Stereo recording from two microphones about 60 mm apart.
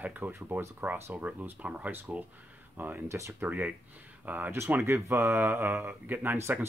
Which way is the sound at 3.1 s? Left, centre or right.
Right.